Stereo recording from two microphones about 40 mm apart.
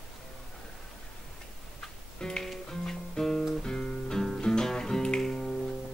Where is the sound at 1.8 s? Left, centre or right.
Centre.